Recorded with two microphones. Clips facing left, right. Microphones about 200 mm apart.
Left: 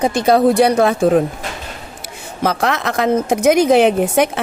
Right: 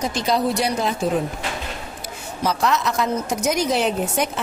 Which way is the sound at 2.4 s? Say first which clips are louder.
Left 3 dB; 55° left (ahead or behind).